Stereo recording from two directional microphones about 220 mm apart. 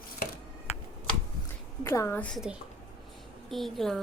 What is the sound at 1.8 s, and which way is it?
A woman's voice, 15° left (ahead or behind).